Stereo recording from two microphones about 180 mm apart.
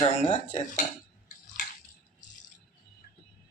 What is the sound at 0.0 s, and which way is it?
Speech, 40° left (ahead or behind).